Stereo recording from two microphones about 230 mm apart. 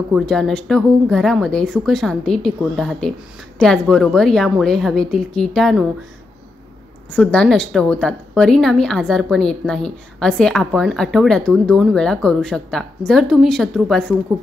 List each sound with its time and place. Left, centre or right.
0.1 s a woman's voice: centre
7.1 s a woman's voice: centre